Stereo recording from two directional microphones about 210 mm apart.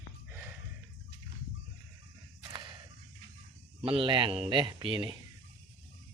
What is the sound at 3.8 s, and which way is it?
Speech, 25° right (ahead or behind).